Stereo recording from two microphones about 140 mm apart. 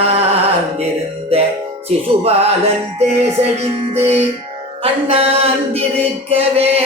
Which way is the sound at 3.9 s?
50° right (ahead or behind).